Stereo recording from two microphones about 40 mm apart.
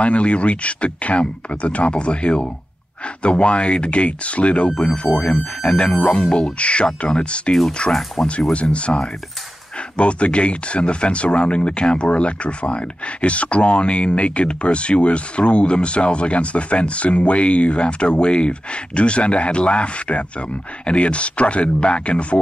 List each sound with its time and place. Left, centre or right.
0.0 s speech: left
4.6 s speech: centre
6.6 s speech: left